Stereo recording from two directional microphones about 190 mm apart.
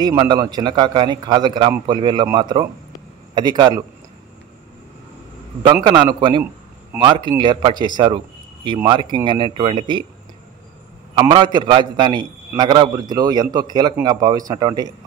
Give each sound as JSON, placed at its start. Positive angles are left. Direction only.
{"t": 0.0, "sound": "a man's voice", "side_deg": -20}
{"t": 5.9, "sound": "a man's voice", "side_deg": -25}
{"t": 11.1, "sound": "a man's voice", "side_deg": -25}